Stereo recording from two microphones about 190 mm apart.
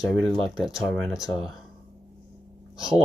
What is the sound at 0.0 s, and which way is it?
Speech, centre (ahead or behind).